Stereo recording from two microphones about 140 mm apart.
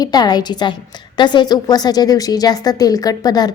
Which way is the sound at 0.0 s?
30° left (ahead or behind).